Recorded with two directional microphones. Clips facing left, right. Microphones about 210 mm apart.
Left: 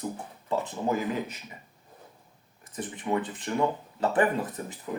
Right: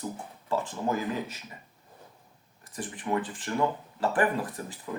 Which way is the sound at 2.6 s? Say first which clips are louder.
Left 1 dB; 20° left (ahead or behind).